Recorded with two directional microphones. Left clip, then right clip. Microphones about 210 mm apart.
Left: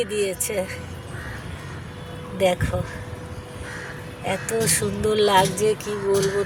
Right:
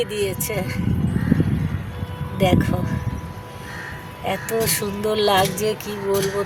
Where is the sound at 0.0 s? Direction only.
15° right (ahead or behind).